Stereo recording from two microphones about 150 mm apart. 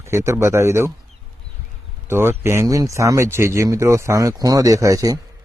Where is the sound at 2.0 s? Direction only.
15° right (ahead or behind).